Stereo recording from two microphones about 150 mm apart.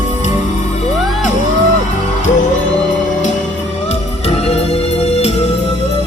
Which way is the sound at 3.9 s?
45° left (ahead or behind).